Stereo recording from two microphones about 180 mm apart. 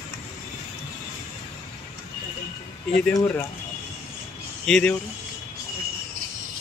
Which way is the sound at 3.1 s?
10° left (ahead or behind).